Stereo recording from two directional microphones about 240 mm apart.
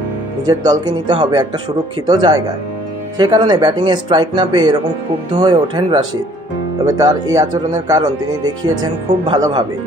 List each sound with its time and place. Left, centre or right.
0.5 s speech: centre